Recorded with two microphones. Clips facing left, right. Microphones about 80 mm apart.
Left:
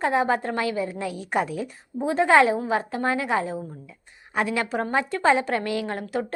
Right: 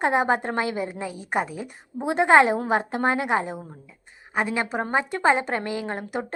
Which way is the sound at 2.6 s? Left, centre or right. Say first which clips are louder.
Right 2 dB; right.